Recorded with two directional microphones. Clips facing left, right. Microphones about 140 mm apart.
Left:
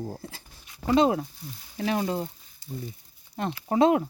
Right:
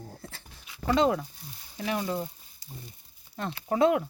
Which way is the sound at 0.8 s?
20° left (ahead or behind).